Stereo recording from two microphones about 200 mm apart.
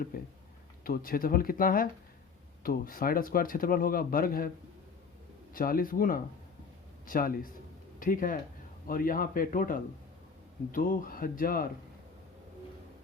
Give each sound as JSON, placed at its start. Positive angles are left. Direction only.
{"t": 0.1, "sound": "speech", "side_deg": 45}
{"t": 5.5, "sound": "speech", "side_deg": 45}